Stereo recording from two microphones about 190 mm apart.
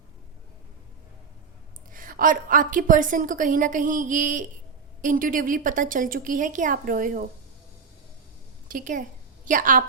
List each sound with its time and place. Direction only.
1.9 s a woman's voice: 45° right (ahead or behind)
8.6 s a woman's voice: 45° right (ahead or behind)